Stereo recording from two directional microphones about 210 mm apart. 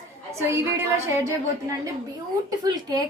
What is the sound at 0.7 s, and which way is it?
Speech, 10° right (ahead or behind).